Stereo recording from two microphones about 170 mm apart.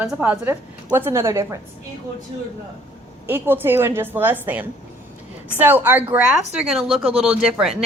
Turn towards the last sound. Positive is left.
turn(degrees=-5)  # may be behind; listen again after turning